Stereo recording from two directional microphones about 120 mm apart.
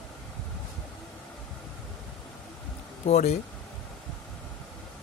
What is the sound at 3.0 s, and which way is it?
Speech, 70° left (ahead or behind).